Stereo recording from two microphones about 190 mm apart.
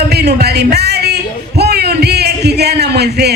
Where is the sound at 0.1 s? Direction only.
60° right (ahead or behind).